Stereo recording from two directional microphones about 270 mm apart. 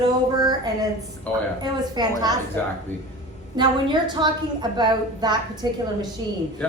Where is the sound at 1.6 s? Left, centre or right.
Centre.